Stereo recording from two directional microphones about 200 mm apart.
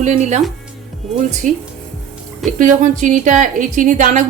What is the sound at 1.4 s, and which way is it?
Speech, 40° right (ahead or behind).